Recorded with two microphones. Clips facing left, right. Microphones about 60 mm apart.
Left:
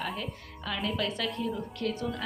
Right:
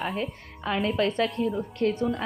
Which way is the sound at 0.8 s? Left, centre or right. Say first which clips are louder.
Right 7 dB; right.